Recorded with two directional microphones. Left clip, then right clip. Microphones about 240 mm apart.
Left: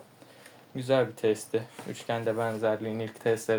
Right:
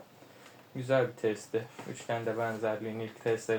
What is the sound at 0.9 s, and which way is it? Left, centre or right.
Speech, left.